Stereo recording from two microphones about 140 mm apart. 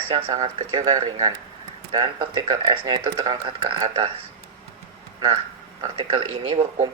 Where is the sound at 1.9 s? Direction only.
35° right (ahead or behind).